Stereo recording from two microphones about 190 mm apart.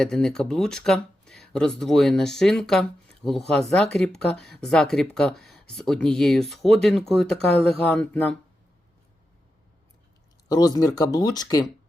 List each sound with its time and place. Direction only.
0.0 s speech: 5° left (ahead or behind)
10.5 s speech: 20° left (ahead or behind)